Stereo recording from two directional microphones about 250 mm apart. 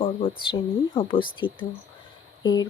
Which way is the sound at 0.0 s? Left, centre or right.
Left.